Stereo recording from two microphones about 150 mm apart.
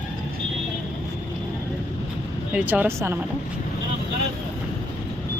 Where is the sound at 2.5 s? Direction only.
10° right (ahead or behind).